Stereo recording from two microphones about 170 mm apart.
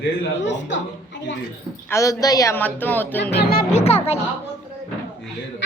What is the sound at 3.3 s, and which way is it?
Speech, 70° left (ahead or behind).